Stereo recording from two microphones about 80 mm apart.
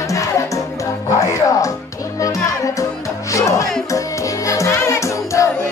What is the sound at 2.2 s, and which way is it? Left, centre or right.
Music, left.